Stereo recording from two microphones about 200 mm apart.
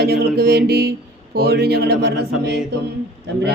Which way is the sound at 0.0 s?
50° right (ahead or behind).